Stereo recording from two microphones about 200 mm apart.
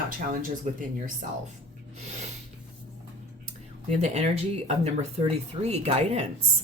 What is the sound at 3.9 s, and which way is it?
Speech, 35° right (ahead or behind).